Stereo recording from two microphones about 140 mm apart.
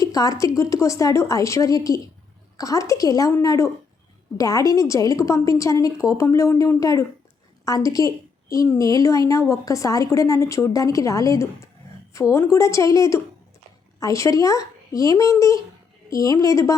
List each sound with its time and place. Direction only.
0.0 s a woman's voice: 25° left (ahead or behind)